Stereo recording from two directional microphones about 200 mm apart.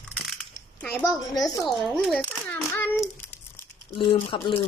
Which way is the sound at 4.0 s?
25° left (ahead or behind).